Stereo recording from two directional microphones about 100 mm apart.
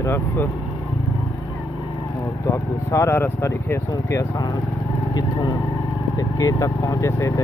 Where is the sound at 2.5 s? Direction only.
30° left (ahead or behind).